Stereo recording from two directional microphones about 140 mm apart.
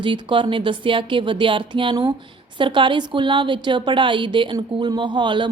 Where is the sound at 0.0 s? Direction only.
35° right (ahead or behind).